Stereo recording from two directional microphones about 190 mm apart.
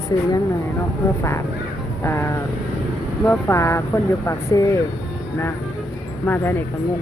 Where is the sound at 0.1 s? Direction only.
20° left (ahead or behind).